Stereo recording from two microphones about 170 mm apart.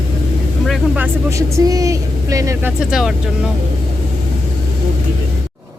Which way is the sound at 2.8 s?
5° right (ahead or behind).